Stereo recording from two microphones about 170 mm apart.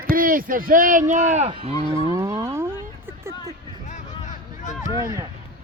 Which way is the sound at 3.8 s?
45° left (ahead or behind).